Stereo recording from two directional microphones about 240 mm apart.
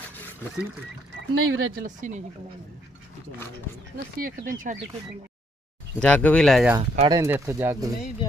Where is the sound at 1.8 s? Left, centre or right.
Right.